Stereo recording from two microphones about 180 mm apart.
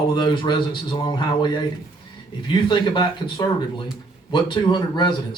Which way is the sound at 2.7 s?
25° left (ahead or behind).